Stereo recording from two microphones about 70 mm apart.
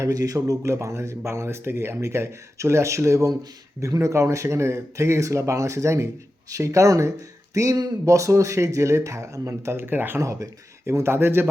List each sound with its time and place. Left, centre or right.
0.1 s speech: right
10.2 s speech: right